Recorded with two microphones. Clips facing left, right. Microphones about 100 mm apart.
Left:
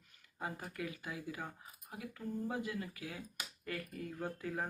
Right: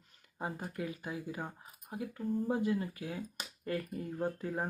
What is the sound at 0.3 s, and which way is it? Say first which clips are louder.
Speech: right 4 dB; 25° right (ahead or behind).